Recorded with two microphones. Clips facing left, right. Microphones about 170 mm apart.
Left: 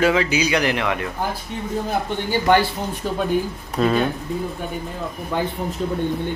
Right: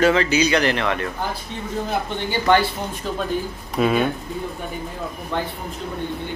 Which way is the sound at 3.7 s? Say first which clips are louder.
Even; 5° right (ahead or behind).